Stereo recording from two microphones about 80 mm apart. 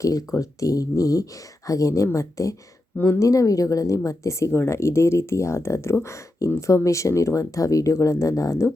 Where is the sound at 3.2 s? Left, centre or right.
Left.